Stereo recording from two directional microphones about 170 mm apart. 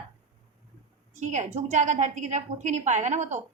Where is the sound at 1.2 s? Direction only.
45° right (ahead or behind).